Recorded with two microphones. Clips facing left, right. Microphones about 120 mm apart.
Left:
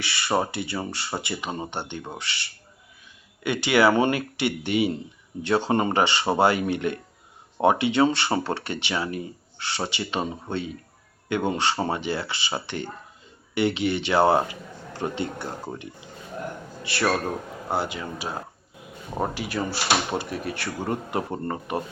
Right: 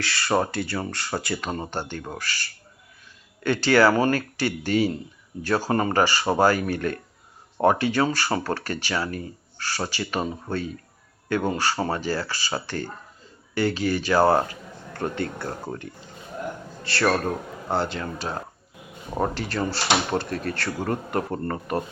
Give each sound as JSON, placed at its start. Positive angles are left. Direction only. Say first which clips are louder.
{"t": 0.2, "sound": "a man's voice", "louder": "right 1 dB", "side_deg": 5}